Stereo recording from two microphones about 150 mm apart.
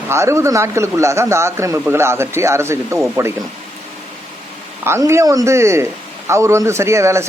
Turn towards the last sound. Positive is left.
turn(degrees=-20)  # may be behind; listen again after turning